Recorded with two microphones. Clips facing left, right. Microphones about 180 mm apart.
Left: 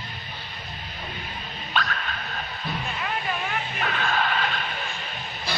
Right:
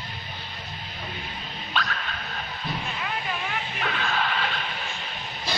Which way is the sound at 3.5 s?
50° left (ahead or behind).